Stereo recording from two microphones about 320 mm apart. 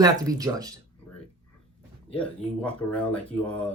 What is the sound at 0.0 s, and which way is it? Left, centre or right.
Speech, centre.